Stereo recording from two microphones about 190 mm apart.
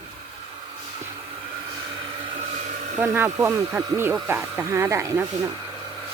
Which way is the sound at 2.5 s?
35° right (ahead or behind).